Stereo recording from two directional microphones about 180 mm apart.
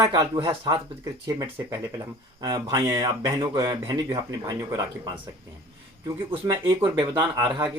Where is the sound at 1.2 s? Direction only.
20° right (ahead or behind).